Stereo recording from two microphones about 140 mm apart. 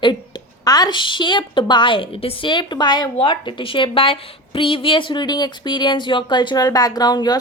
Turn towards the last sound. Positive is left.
turn(degrees=30)  # may be behind; listen again after turning